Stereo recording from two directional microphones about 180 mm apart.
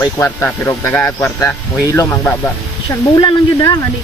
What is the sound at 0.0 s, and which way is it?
Speech, 15° left (ahead or behind).